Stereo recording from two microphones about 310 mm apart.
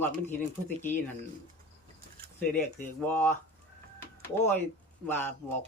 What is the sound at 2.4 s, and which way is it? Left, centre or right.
Speech, centre.